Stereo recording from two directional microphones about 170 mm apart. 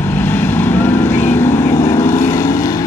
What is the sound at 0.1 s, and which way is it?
Vehicle, 10° left (ahead or behind).